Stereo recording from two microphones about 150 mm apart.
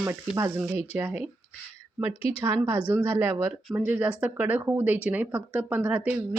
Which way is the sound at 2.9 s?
10° right (ahead or behind).